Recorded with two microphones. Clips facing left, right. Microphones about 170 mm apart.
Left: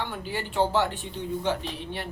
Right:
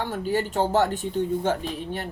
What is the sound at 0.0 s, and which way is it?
Speech, 45° right (ahead or behind).